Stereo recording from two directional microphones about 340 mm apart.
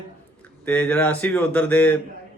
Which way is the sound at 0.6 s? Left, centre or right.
Centre.